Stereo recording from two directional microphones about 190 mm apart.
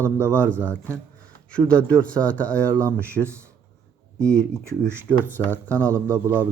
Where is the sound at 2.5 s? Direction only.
15° right (ahead or behind).